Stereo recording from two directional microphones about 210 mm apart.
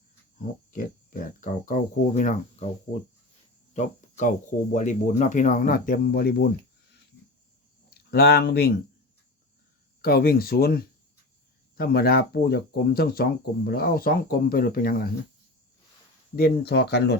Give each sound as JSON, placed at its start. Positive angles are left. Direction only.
{"t": 0.7, "sound": "speech", "side_deg": 40}
{"t": 8.1, "sound": "speech", "side_deg": 50}
{"t": 10.0, "sound": "speech", "side_deg": 45}
{"t": 16.3, "sound": "speech", "side_deg": 50}